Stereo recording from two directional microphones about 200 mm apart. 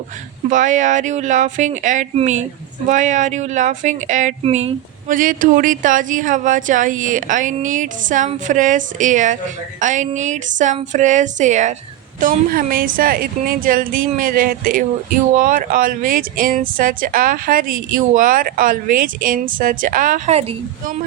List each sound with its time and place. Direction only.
0.5 s speech: 40° right (ahead or behind)